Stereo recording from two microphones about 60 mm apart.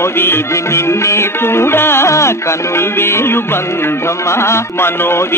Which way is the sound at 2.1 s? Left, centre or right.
Left.